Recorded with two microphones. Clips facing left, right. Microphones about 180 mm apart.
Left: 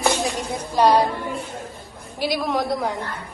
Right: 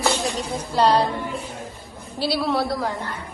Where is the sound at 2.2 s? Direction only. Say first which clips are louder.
Right 1 dB; 15° left (ahead or behind).